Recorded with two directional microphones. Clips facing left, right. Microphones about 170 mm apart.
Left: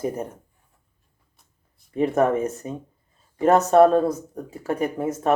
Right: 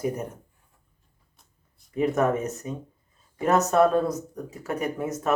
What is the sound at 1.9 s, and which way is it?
Speech, 30° left (ahead or behind).